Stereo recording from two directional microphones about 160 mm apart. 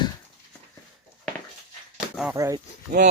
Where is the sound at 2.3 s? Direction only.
20° right (ahead or behind).